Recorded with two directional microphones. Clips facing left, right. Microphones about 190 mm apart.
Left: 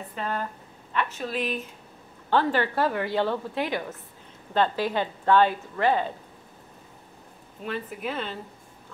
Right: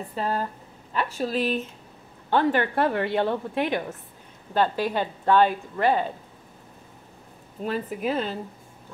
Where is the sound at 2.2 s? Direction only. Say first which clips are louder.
Right 2 dB; 15° right (ahead or behind).